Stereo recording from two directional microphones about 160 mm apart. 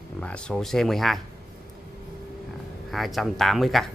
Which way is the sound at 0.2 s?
5° left (ahead or behind).